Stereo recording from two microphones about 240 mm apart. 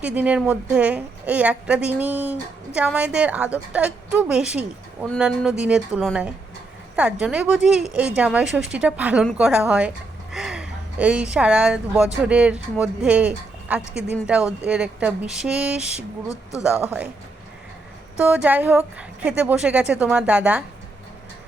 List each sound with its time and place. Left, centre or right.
0.0 s a woman's voice: centre
16.3 s speech: centre
16.6 s speech: centre
18.2 s a woman's voice: centre